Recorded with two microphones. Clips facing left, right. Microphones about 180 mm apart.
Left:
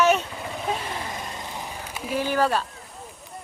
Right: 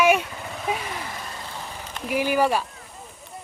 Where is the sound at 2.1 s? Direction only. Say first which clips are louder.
Right 2 dB; 10° right (ahead or behind).